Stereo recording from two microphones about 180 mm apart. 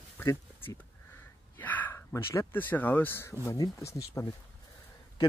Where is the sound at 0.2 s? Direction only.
15° left (ahead or behind).